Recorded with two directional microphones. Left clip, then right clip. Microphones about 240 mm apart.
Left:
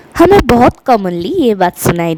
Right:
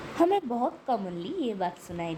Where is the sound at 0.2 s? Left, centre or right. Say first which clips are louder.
Left 19 dB; left.